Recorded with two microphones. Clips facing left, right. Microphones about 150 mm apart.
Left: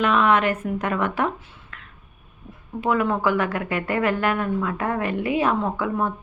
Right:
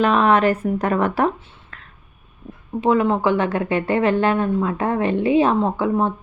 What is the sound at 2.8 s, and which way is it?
Speech, 25° right (ahead or behind).